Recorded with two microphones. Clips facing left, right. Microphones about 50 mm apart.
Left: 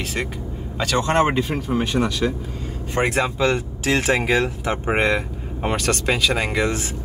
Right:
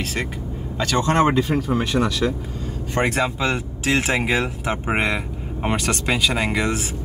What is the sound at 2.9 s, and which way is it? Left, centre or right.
Speech, centre.